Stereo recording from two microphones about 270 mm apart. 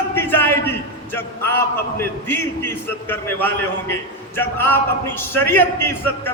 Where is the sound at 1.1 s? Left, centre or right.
Centre.